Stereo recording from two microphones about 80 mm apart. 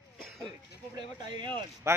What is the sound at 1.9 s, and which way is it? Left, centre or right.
Speech, right.